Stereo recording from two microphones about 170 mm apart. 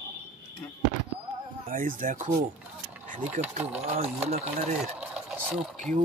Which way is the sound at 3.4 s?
10° right (ahead or behind).